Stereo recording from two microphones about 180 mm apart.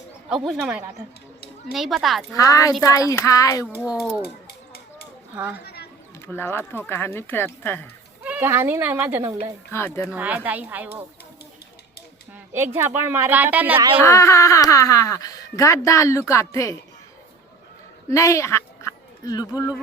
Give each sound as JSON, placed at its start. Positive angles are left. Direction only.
{"t": 0.3, "sound": "speech", "side_deg": 0}
{"t": 2.3, "sound": "a woman's voice", "side_deg": 20}
{"t": 3.7, "sound": "speech", "side_deg": -5}
{"t": 4.2, "sound": "a sound", "side_deg": 60}
{"t": 5.3, "sound": "speech", "side_deg": -10}
{"t": 5.6, "sound": "a sound", "side_deg": 60}
{"t": 6.2, "sound": "speech", "side_deg": 15}
{"t": 8.2, "sound": "speech", "side_deg": -10}
{"t": 9.7, "sound": "speech", "side_deg": 15}
{"t": 10.1, "sound": "speech", "side_deg": -10}
{"t": 12.7, "sound": "speech", "side_deg": -15}
{"t": 13.7, "sound": "a woman's voice", "side_deg": -30}
{"t": 14.0, "sound": "speech", "side_deg": 15}
{"t": 18.1, "sound": "speech", "side_deg": 15}